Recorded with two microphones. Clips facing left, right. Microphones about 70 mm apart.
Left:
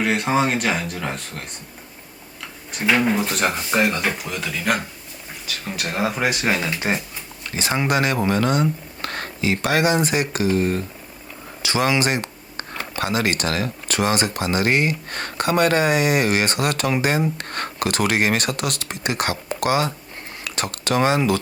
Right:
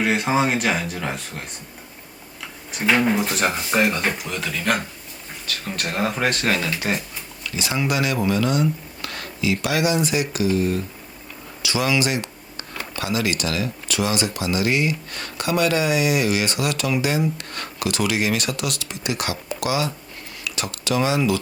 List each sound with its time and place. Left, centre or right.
0.0 s speech: centre
2.7 s speech: centre; by 7.0 s left
7.4 s speech: left